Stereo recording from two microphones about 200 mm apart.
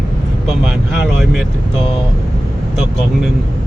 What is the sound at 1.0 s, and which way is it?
Speech, centre (ahead or behind).